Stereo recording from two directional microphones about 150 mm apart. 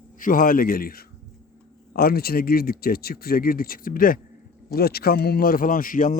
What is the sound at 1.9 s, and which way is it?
Speech, 90° left.